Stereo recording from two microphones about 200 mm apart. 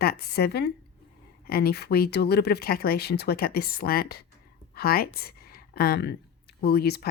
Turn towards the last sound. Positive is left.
turn(degrees=55)  # may be behind; listen again after turning